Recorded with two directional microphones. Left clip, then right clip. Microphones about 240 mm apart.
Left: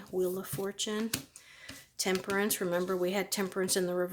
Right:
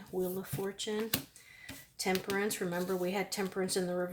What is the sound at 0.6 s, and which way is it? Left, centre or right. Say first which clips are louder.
Speech: left 2 dB; left.